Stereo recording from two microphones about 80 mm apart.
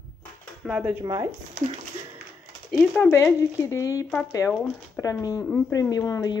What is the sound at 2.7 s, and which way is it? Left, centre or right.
Speech, centre.